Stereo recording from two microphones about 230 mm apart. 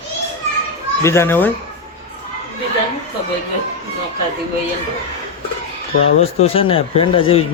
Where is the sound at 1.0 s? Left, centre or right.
Centre.